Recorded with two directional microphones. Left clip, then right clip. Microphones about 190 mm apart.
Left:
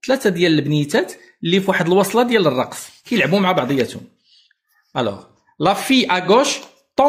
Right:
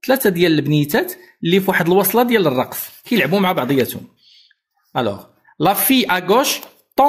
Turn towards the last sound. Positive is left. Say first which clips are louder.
# right 1 dB
turn(degrees=-35)  # may be behind; listen again after turning